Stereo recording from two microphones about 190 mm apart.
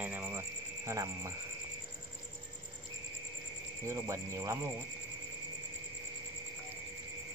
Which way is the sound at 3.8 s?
15° right (ahead or behind).